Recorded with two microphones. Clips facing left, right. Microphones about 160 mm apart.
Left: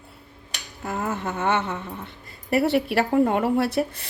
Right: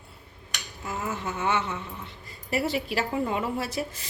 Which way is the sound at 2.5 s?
60° left (ahead or behind).